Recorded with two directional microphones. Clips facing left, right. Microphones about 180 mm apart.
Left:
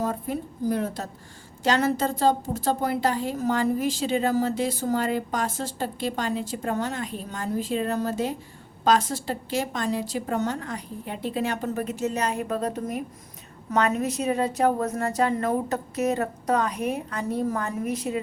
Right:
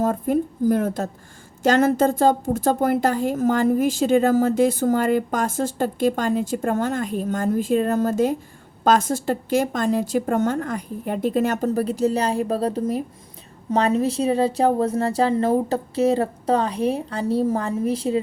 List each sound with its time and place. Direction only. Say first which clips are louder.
0.0 s a woman's voice: right 7 dB; 50° right (ahead or behind); by 18.2 s 30° right (ahead or behind)